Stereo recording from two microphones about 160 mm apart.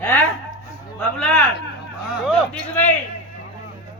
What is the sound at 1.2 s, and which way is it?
Speech, 5° left (ahead or behind).